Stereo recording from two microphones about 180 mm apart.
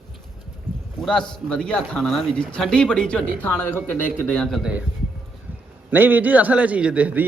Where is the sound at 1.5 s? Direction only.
5° left (ahead or behind).